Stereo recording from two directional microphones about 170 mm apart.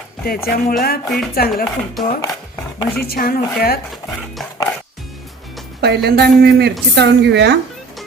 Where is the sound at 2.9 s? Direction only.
65° left (ahead or behind).